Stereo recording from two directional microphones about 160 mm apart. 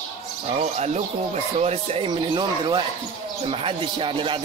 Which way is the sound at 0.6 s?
45° right (ahead or behind).